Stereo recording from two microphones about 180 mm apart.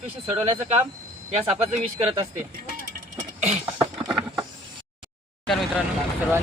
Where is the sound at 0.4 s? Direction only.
30° right (ahead or behind).